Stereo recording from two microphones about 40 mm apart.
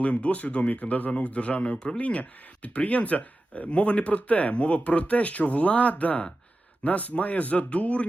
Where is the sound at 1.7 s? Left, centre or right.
Centre.